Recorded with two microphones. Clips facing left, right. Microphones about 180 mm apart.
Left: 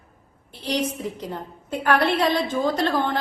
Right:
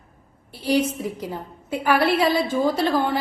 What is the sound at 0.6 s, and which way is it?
A woman's voice, 10° right (ahead or behind).